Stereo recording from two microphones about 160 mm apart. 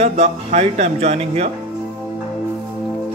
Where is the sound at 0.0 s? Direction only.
40° right (ahead or behind).